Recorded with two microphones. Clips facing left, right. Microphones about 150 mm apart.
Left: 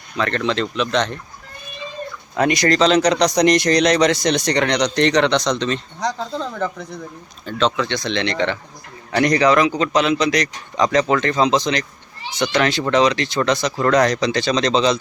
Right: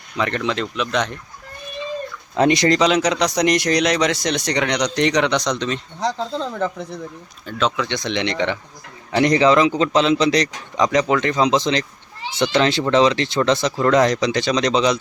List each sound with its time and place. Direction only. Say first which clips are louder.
0.2 s speech: left 1 dB; 10° right (ahead or behind)
2.3 s a man's voice: right 2 dB; 25° right (ahead or behind)
2.7 s speech: left 2 dB; 10° right (ahead or behind)
7.4 s a man's voice: left 2 dB; 10° right (ahead or behind); by 10.5 s 30° right (ahead or behind)
10.8 s a man's voice: left 1 dB; 15° right (ahead or behind)